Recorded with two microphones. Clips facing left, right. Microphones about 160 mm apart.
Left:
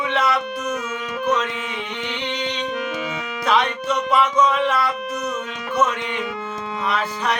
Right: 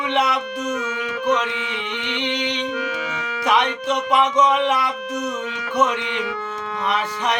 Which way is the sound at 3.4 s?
15° right (ahead or behind).